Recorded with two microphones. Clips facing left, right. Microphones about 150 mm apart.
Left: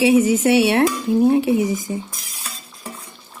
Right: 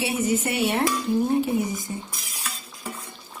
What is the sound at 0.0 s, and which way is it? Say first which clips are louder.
Speech: left 10 dB; 90° left.